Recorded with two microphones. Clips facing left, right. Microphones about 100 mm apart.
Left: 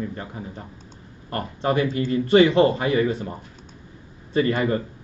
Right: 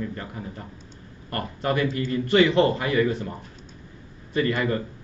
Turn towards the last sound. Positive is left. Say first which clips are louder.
# left 3 dB
turn(degrees=30)  # may be behind; listen again after turning